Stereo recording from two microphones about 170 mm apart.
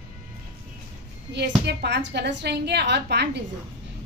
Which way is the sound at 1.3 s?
80° right.